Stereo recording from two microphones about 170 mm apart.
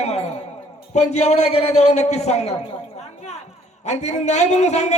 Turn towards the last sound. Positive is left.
turn(degrees=40)  # may be behind; listen again after turning